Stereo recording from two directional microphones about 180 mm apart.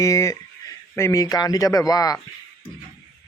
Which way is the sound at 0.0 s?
15° left (ahead or behind).